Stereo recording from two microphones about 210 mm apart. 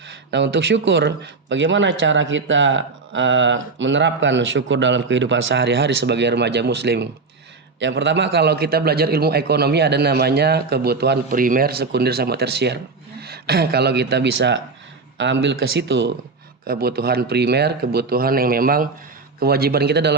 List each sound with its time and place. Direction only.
0.3 s a man's voice: 60° right (ahead or behind)